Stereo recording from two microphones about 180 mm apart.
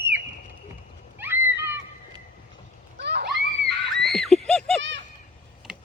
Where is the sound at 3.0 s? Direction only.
65° right (ahead or behind).